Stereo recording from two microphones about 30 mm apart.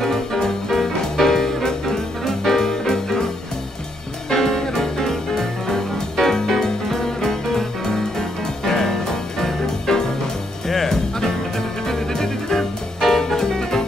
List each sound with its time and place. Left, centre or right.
0.0 s music: centre
4.3 s music: centre